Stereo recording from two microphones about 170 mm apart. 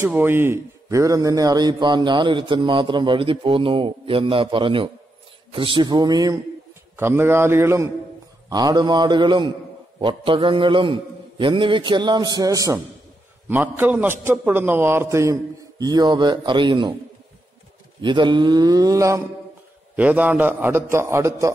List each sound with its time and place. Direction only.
0.0 s a man's voice: 10° right (ahead or behind); by 16.9 s 30° right (ahead or behind)
18.0 s a man's voice: 30° right (ahead or behind)